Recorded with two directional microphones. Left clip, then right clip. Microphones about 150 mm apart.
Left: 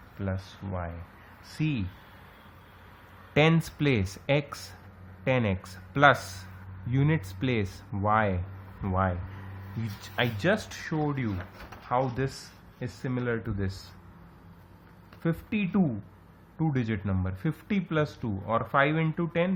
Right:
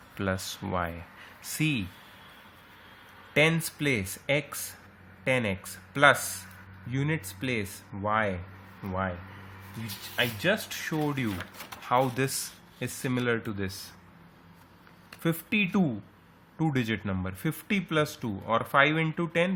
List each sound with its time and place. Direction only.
0.2 s speech: 65° right (ahead or behind)
1.5 s speech: 30° right (ahead or behind)
3.3 s speech: 5° left (ahead or behind)
10.2 s speech: centre (ahead or behind)
10.8 s speech: 20° right (ahead or behind)
15.2 s speech: 25° right (ahead or behind)